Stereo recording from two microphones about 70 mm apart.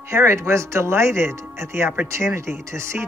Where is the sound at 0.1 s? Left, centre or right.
Right.